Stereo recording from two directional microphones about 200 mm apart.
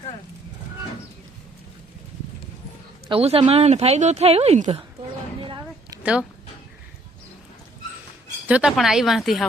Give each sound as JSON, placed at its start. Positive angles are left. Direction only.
{"t": 3.1, "sound": "speech", "side_deg": -30}
{"t": 5.4, "sound": "a sound", "side_deg": -25}
{"t": 6.0, "sound": "a woman's voice", "side_deg": -5}
{"t": 8.4, "sound": "speech", "side_deg": -5}